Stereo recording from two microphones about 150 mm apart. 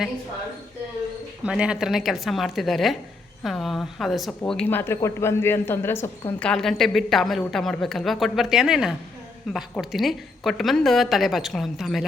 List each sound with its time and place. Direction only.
1.5 s a woman's voice: 5° right (ahead or behind); by 6.5 s 15° left (ahead or behind)
6.5 s a woman's voice: 5° left (ahead or behind)